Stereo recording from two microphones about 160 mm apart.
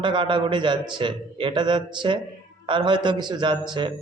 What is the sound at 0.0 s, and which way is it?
A man's voice, 30° right (ahead or behind).